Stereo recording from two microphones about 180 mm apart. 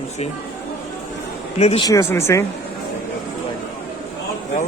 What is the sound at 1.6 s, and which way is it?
Speech, 35° left (ahead or behind).